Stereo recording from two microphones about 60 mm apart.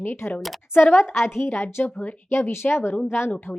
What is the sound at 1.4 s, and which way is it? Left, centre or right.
Speech, left.